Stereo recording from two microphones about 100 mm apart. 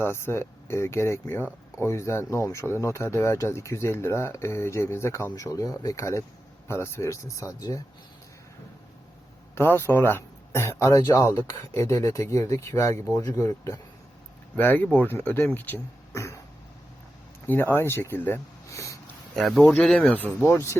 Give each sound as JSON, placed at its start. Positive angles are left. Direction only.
{"t": 0.0, "sound": "speech", "side_deg": 25}
{"t": 9.6, "sound": "speech", "side_deg": 25}
{"t": 14.5, "sound": "speech", "side_deg": 20}
{"t": 16.1, "sound": "cough", "side_deg": 30}
{"t": 17.4, "sound": "speech", "side_deg": 20}
{"t": 18.7, "sound": "a sound", "side_deg": 30}
{"t": 19.4, "sound": "speech", "side_deg": 0}
{"t": 20.1, "sound": "speech", "side_deg": 15}